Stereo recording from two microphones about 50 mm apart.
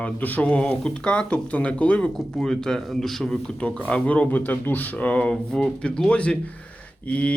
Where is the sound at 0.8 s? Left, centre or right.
Centre.